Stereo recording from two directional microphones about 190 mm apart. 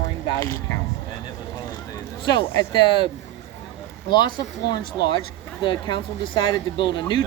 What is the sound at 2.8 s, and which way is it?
Speech, 25° left (ahead or behind).